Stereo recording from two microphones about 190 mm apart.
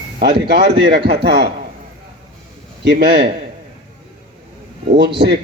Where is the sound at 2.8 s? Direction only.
60° right (ahead or behind).